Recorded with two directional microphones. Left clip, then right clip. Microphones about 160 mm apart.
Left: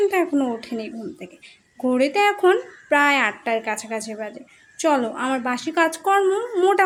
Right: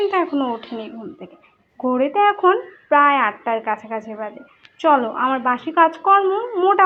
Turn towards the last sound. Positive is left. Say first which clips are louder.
# right 1 dB
turn(degrees=30)  # may be behind; listen again after turning